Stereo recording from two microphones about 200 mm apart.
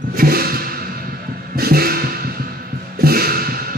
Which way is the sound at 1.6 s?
50° right (ahead or behind).